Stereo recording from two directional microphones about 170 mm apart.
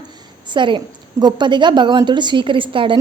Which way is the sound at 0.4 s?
30° right (ahead or behind).